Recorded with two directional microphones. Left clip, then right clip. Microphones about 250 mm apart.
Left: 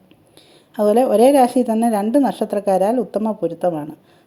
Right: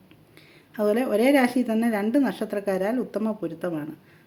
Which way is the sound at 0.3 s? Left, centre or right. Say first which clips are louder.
Left 8 dB; centre.